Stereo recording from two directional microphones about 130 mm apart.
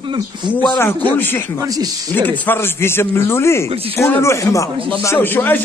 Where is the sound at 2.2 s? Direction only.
15° left (ahead or behind).